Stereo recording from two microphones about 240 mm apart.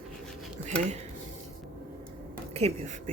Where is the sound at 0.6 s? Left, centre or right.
Right.